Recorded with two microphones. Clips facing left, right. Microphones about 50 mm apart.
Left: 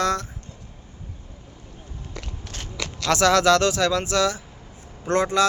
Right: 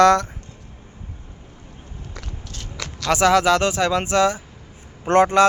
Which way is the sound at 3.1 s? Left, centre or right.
Centre.